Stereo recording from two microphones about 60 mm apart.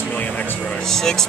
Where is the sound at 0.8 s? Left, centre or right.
Centre.